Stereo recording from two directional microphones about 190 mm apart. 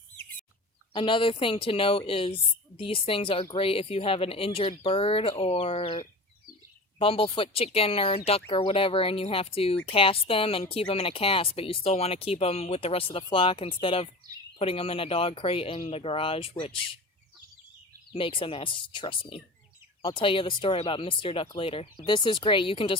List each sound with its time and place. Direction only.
0.9 s speech: 25° left (ahead or behind)
18.1 s speech: 25° left (ahead or behind)